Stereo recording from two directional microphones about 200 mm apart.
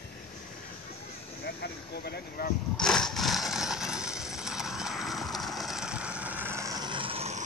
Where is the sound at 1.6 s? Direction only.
50° left (ahead or behind).